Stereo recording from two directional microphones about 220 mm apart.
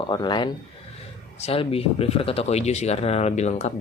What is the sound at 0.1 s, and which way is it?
Speech, 20° left (ahead or behind).